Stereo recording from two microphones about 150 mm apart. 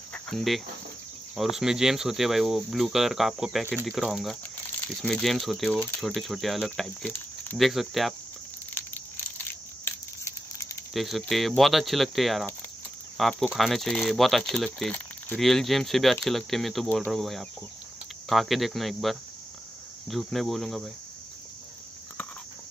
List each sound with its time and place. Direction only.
0.1 s cricket: centre (ahead or behind)
1.3 s speech: centre (ahead or behind)
7.5 s speech: centre (ahead or behind)
8.7 s a sound: 15° left (ahead or behind)
10.9 s speech: centre (ahead or behind)